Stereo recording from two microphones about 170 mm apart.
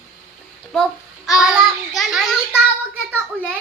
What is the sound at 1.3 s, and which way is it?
Child singing, 5° right (ahead or behind).